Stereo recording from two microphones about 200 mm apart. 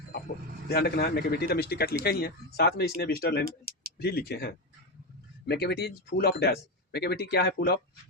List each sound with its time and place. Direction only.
0.7 s speech: 55° left (ahead or behind)
3.7 s a sound: 45° right (ahead or behind)
4.0 s speech: 50° left (ahead or behind)